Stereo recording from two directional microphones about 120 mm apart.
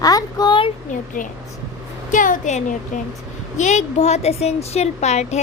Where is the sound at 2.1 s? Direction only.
90° left.